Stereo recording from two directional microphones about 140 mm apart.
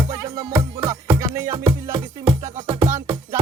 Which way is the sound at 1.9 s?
40° right (ahead or behind).